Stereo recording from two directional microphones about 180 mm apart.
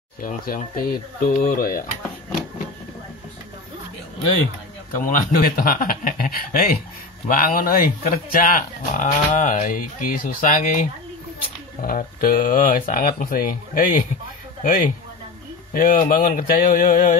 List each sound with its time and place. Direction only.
0.2 s speech: 45° left (ahead or behind)
4.9 s a man's voice: 50° left (ahead or behind)